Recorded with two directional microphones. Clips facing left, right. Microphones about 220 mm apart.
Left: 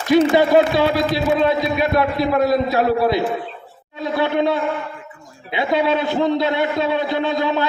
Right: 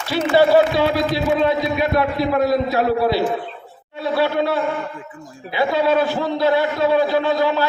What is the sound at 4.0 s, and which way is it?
A man's voice, 20° left (ahead or behind).